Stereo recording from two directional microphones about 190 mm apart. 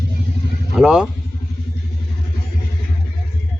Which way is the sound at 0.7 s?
5° right (ahead or behind).